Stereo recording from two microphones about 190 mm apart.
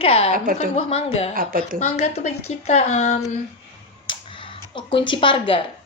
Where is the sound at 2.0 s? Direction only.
35° left (ahead or behind).